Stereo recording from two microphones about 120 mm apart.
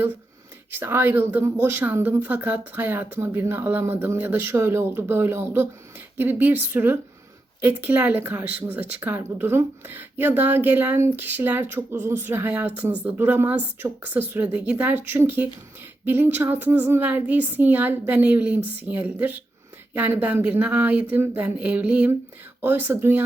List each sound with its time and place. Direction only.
0.7 s speech: 20° right (ahead or behind)